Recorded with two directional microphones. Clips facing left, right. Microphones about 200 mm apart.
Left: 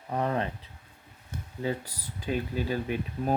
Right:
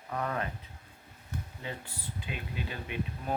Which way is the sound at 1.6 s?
40° left (ahead or behind).